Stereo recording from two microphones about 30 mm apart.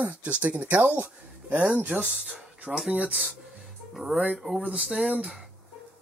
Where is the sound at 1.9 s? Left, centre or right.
Right.